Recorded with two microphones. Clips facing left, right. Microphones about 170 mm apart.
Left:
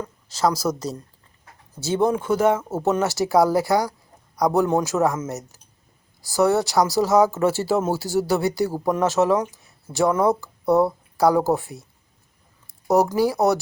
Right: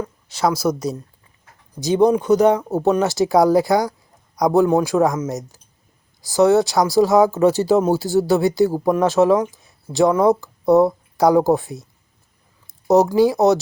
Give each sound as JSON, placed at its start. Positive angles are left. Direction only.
{"t": 0.0, "sound": "a woman's voice", "side_deg": -10}
{"t": 13.1, "sound": "speech", "side_deg": -20}